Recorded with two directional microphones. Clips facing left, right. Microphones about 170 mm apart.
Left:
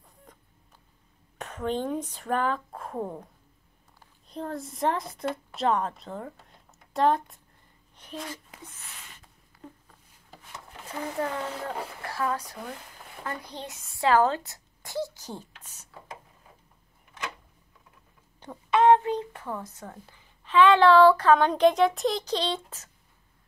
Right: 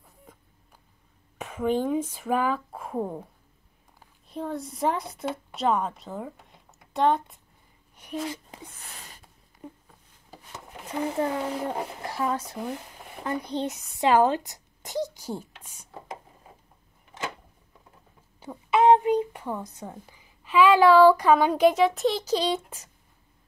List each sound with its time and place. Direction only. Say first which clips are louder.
0.3 s cat: right 2 dB; 5° right (ahead or behind)
1.4 s speech: right 4 dB; 10° right (ahead or behind)
4.3 s a woman's voice: right 2 dB; centre (ahead or behind)
7.9 s speech: right 6 dB; 10° right (ahead or behind)
8.5 s a sound: right 3 dB; 35° right (ahead or behind)
10.9 s a child's voice: right 4 dB; 20° right (ahead or behind)
18.4 s speech: right 1 dB; 10° right (ahead or behind)